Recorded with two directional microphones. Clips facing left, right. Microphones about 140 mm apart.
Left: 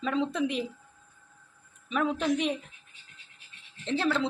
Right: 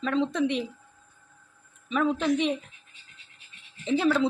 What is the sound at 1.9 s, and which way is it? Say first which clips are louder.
Speech: right 3 dB; 5° left (ahead or behind).